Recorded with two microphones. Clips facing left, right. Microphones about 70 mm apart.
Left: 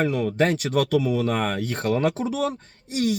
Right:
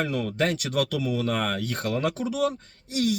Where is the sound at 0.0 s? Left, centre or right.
Left.